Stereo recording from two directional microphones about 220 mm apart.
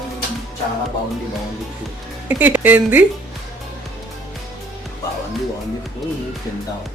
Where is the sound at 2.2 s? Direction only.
5° right (ahead or behind).